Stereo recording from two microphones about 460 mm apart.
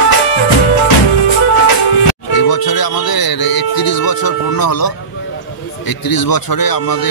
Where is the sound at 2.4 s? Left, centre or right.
Left.